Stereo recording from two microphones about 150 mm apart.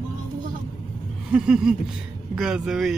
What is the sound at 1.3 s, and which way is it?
Speech, 5° right (ahead or behind).